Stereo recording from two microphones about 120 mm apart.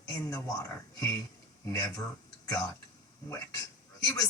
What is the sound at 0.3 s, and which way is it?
Speech, 30° left (ahead or behind).